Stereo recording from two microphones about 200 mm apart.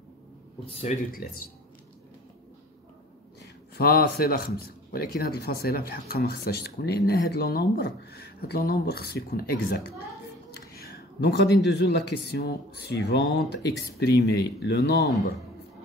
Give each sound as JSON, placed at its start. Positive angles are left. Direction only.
{"t": 0.7, "sound": "speech", "side_deg": 35}
{"t": 3.7, "sound": "speech", "side_deg": 50}